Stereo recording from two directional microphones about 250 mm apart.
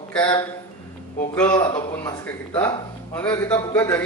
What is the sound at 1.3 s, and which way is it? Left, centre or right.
A man's voice, centre.